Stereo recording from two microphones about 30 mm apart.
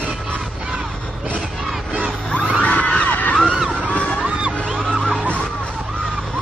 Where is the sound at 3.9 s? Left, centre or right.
Left.